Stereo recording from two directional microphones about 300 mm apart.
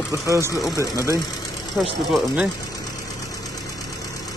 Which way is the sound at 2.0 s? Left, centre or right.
Centre.